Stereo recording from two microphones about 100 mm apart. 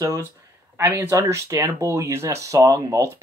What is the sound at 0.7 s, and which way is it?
Speech, 25° right (ahead or behind).